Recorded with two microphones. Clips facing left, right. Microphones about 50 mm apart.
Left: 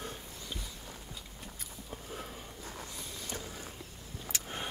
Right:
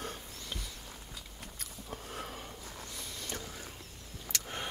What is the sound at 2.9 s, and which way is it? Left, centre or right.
Vehicle, right.